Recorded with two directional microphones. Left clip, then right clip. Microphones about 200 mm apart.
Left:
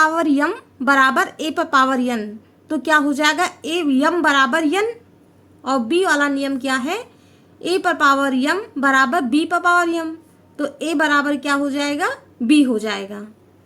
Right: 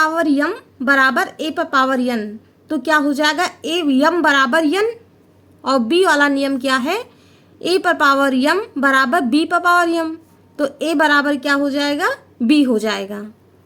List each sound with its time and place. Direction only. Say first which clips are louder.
0.0 s a woman's voice: even; centre (ahead or behind)